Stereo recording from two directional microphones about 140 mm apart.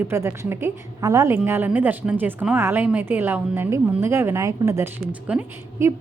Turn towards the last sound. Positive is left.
turn(degrees=-10)  # may be behind; listen again after turning